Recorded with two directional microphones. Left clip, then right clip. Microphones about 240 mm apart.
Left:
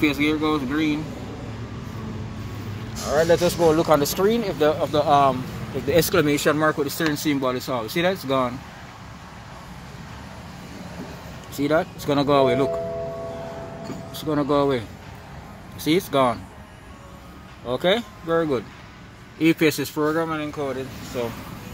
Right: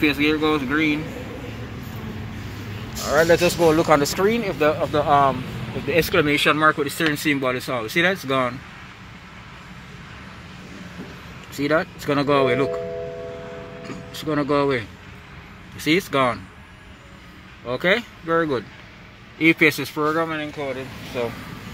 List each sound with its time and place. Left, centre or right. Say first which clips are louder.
0.0 s speech: right 2 dB; centre
3.1 s speech: right 2 dB; centre
5.9 s speech: even; left
11.5 s speech: even; centre
13.8 s speech: right 1 dB; centre
17.6 s speech: right 1 dB; centre
19.3 s speech: right 3 dB; centre